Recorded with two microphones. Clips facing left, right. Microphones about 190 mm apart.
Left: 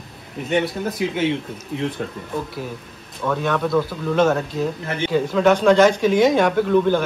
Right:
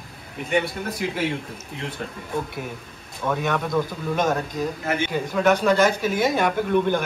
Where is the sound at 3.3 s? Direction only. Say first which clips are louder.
Left 3 dB; 10° right (ahead or behind).